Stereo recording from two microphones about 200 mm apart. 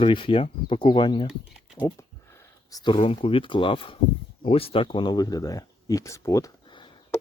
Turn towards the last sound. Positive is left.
turn(degrees=25)  # may be behind; listen again after turning